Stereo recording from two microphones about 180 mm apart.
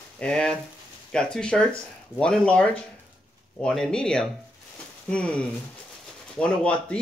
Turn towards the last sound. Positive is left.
turn(degrees=5)  # may be behind; listen again after turning